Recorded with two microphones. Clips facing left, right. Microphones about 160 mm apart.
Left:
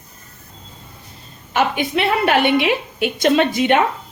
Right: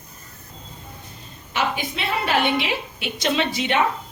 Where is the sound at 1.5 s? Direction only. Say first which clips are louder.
Left 7 dB; 60° left (ahead or behind).